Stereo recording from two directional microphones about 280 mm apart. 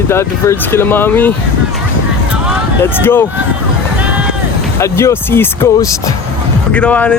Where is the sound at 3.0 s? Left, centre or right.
Centre.